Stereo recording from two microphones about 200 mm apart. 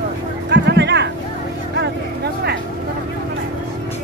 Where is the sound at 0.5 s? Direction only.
60° right (ahead or behind).